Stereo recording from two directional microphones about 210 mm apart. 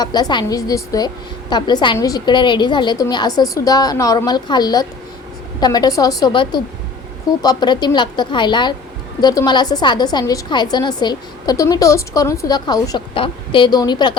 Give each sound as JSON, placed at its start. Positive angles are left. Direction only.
{"t": 0.0, "sound": "a woman's voice", "side_deg": 20}